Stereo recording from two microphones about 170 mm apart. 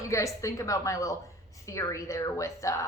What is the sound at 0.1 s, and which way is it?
A woman's voice, 20° left (ahead or behind).